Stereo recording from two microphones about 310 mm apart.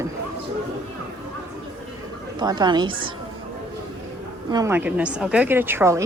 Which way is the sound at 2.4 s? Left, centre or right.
Centre.